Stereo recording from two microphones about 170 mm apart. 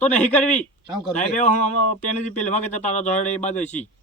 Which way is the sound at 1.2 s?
45° left (ahead or behind).